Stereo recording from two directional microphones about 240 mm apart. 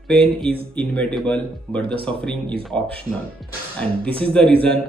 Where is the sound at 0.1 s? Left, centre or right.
Centre.